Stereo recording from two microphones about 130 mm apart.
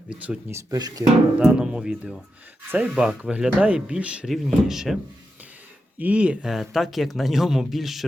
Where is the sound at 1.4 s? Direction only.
5° right (ahead or behind).